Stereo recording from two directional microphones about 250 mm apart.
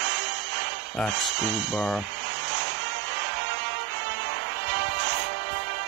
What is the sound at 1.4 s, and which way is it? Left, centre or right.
Speech, right.